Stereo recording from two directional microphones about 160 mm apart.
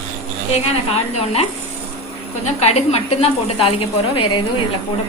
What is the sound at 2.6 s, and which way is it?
A woman's voice, 40° left (ahead or behind).